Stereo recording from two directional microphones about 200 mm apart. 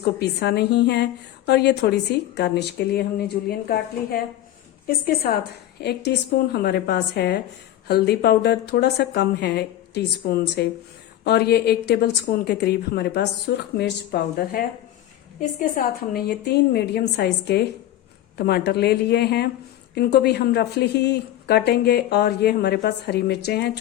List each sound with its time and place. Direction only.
0.0 s a woman's voice: 55° left (ahead or behind)
4.9 s a woman's voice: 50° left (ahead or behind)
15.7 s a woman's voice: 45° left (ahead or behind)